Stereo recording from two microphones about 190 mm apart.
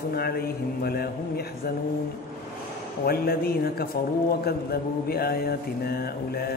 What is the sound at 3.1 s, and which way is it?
Mantra, 55° left (ahead or behind).